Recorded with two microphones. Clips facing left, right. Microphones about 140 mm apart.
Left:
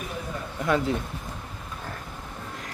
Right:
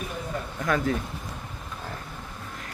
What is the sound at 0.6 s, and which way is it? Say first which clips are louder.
Speech: left 1 dB; 25° left (ahead or behind).